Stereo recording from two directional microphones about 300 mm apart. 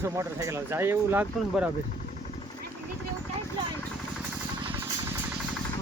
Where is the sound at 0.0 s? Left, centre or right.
Centre.